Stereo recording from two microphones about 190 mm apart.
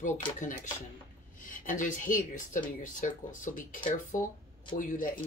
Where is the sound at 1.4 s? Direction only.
45° left (ahead or behind).